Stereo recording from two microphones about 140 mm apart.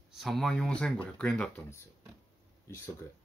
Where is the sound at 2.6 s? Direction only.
20° left (ahead or behind).